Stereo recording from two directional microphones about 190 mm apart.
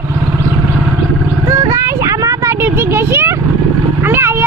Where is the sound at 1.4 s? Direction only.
15° right (ahead or behind).